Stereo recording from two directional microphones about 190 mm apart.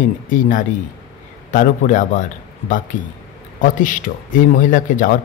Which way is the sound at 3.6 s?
45° left (ahead or behind).